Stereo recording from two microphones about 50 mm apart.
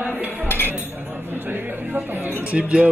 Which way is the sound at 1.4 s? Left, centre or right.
Right.